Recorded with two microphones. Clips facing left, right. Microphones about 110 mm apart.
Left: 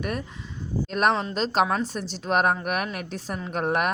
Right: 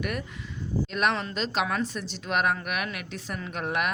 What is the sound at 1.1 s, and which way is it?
Speech, 35° left (ahead or behind).